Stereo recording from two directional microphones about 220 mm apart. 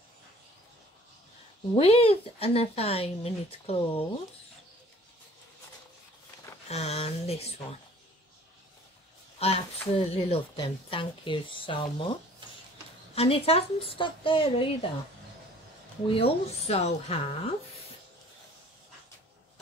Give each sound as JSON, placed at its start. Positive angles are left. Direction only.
{"t": 1.8, "sound": "a woman's voice", "side_deg": 25}
{"t": 6.7, "sound": "a woman's voice", "side_deg": 30}
{"t": 9.4, "sound": "a woman's voice", "side_deg": 25}
{"t": 16.1, "sound": "a woman's voice", "side_deg": 25}